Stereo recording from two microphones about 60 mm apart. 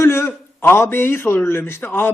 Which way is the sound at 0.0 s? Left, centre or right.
Left.